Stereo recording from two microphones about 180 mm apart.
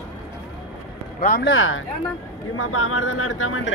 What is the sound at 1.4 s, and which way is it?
Speech, 90° left.